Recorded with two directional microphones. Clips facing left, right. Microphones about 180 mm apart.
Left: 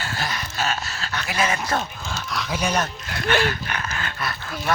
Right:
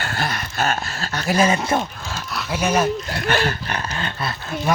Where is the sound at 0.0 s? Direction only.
55° right (ahead or behind); by 1.8 s 25° right (ahead or behind).